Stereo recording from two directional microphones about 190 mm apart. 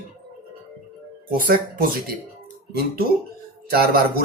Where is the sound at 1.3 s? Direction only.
50° right (ahead or behind).